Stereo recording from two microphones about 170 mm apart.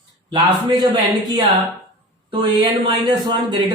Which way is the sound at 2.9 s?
25° right (ahead or behind).